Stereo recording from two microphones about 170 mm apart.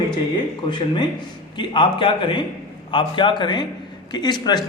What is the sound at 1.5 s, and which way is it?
Speech, 30° left (ahead or behind).